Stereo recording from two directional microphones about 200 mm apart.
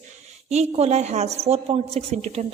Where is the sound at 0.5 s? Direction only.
35° right (ahead or behind).